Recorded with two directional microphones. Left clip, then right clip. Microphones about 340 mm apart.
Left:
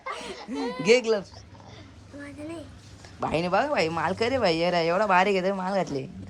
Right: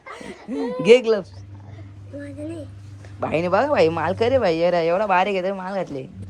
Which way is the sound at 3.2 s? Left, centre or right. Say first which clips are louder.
Right 5 dB; centre.